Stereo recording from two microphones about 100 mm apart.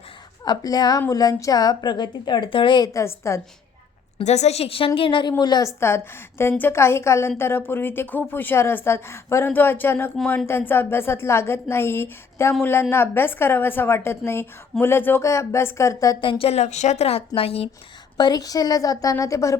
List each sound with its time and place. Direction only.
0.4 s a woman's voice: 40° left (ahead or behind)
2.9 s a woman's voice: 30° left (ahead or behind)
4.3 s a woman's voice: 90° left
4.9 s speech: 55° left (ahead or behind)
5.4 s a woman's voice: 45° left (ahead or behind)
5.6 s a woman's voice: 25° left (ahead or behind)
16.2 s a woman's voice: 65° left (ahead or behind)
18.2 s a woman's voice: 40° left (ahead or behind)